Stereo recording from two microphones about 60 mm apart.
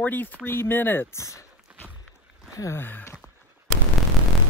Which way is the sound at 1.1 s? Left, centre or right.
Left.